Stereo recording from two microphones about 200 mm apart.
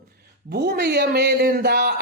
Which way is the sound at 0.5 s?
55° right (ahead or behind).